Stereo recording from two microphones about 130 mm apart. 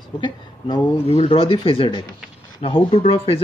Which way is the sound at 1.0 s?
50° left (ahead or behind).